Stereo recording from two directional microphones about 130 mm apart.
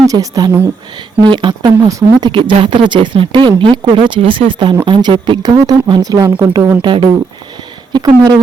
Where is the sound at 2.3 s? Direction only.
40° right (ahead or behind).